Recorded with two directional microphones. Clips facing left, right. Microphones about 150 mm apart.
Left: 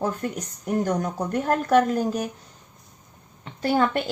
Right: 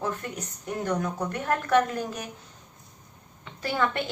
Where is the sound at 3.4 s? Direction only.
40° left (ahead or behind).